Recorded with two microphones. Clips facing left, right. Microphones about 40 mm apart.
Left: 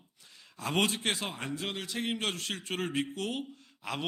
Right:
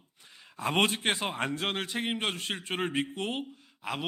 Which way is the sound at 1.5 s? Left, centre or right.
Right.